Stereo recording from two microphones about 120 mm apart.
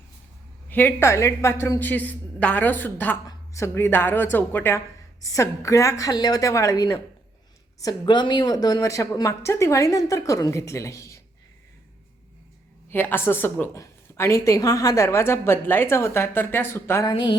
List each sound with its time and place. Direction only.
0.7 s a woman's voice: 15° left (ahead or behind)
12.9 s a woman's voice: 20° left (ahead or behind)
17.1 s a sound: 40° left (ahead or behind)